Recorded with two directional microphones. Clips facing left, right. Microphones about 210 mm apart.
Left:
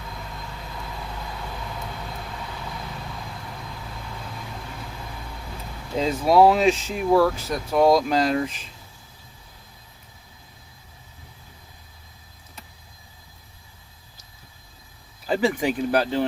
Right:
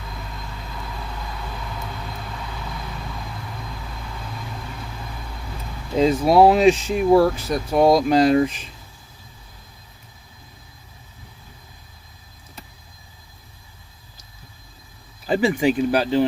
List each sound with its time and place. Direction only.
6.0 s speech: 15° right (ahead or behind)
15.3 s speech: 10° right (ahead or behind)